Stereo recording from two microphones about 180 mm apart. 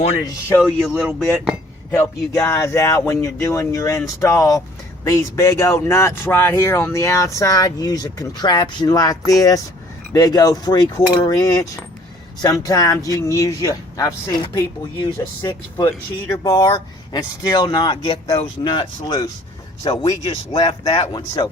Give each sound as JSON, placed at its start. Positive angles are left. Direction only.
{"t": 0.6, "sound": "speech", "side_deg": 0}
{"t": 1.9, "sound": "speech", "side_deg": 15}